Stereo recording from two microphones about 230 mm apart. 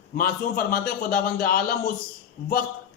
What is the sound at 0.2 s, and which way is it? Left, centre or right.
Speech, left.